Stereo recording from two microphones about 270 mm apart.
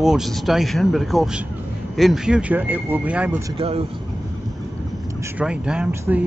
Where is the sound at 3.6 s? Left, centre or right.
Right.